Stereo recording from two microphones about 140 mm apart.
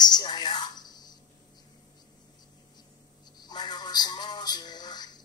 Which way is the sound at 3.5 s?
30° left (ahead or behind).